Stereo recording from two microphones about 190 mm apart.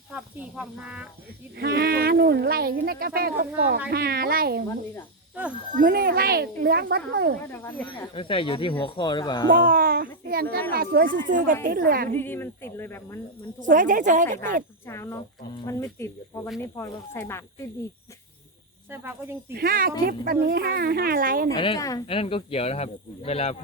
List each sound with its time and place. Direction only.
0.1 s speech: 5° right (ahead or behind)
1.5 s speech: 55° right (ahead or behind)
5.8 s speech: 50° right (ahead or behind)
7.5 s speech: 10° left (ahead or behind)
8.1 s speech: 30° left (ahead or behind)
9.5 s speech: 45° right (ahead or behind)
12.1 s speech: 10° left (ahead or behind)
13.6 s speech: 40° right (ahead or behind)
14.8 s speech: 15° left (ahead or behind)
18.9 s speech: 10° right (ahead or behind)
19.5 s speech: 50° right (ahead or behind)
21.5 s speech: 25° left (ahead or behind)
22.0 s speech: 30° left (ahead or behind)